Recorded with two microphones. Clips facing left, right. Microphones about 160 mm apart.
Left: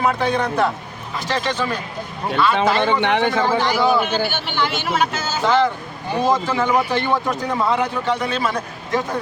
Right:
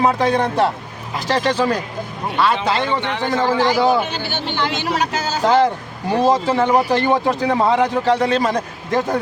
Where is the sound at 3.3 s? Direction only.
40° right (ahead or behind).